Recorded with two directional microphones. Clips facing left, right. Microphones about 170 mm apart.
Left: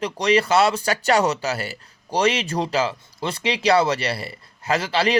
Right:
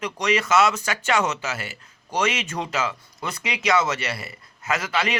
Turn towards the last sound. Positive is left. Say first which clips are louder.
# left 5 dB
turn(degrees=30)  # may be behind; listen again after turning